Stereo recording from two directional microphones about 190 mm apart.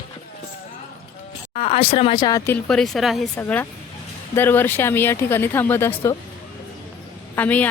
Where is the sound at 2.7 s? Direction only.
5° left (ahead or behind).